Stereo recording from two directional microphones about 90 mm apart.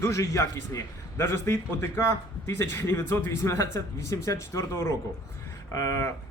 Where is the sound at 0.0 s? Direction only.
35° left (ahead or behind).